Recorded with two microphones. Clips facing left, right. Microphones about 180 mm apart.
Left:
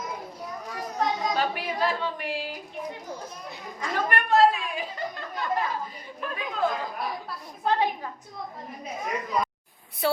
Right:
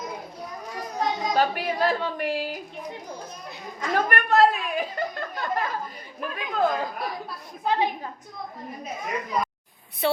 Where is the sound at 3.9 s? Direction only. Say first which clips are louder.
Right 1 dB; 55° right (ahead or behind).